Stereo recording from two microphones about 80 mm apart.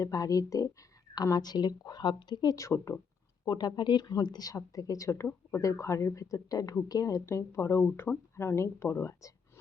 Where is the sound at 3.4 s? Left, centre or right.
Left.